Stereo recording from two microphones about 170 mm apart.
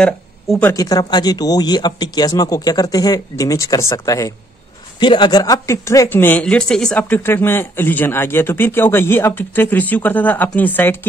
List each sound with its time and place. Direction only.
0.0 s speech: 5° left (ahead or behind)
0.7 s speech: 20° left (ahead or behind)